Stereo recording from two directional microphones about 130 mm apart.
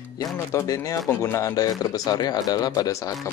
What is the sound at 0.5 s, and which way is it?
Speech, 25° left (ahead or behind).